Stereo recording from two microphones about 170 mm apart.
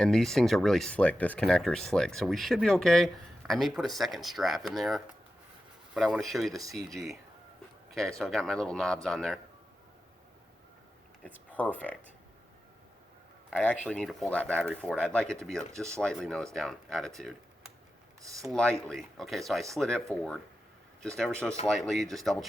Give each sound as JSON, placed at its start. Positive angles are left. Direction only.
{"t": 0.0, "sound": "speech", "side_deg": 0}
{"t": 6.6, "sound": "speech", "side_deg": -20}
{"t": 6.9, "sound": "speech", "side_deg": 0}
{"t": 7.9, "sound": "a sound", "side_deg": 5}
{"t": 8.2, "sound": "speech", "side_deg": 5}
{"t": 11.5, "sound": "speech", "side_deg": 10}
{"t": 13.8, "sound": "speech", "side_deg": 5}
{"t": 18.2, "sound": "speech", "side_deg": -20}
{"t": 18.4, "sound": "speech", "side_deg": 5}